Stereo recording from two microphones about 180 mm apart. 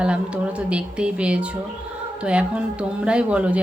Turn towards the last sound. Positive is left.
turn(degrees=-5)  # may be behind; listen again after turning